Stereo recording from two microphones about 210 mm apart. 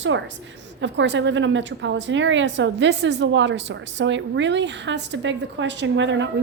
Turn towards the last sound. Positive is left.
turn(degrees=-60)  # may be behind; listen again after turning